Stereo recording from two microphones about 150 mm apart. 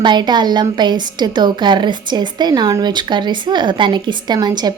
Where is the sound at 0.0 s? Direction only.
30° right (ahead or behind).